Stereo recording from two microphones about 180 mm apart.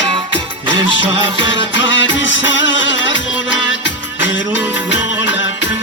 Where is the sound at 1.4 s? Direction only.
90° left.